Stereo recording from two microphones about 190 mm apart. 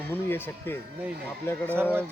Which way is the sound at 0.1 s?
10° left (ahead or behind).